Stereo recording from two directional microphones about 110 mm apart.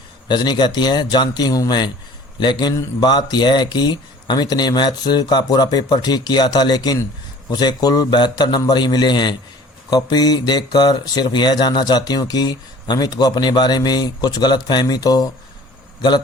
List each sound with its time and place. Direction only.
0.3 s speech: 40° left (ahead or behind)